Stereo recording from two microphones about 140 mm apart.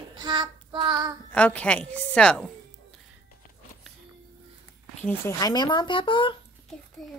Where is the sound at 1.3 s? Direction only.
10° left (ahead or behind).